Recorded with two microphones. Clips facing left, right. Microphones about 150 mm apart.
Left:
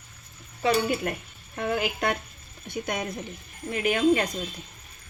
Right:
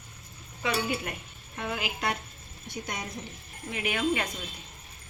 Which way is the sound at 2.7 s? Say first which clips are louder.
Left 7 dB; 55° left (ahead or behind).